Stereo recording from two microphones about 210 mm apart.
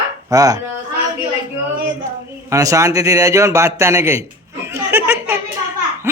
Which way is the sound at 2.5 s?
15° right (ahead or behind).